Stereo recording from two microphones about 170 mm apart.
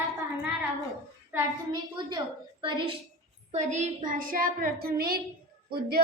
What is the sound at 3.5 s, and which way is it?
A woman's voice, 40° right (ahead or behind).